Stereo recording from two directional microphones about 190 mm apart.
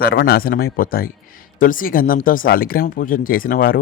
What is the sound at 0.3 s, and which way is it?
Speech, 50° left (ahead or behind).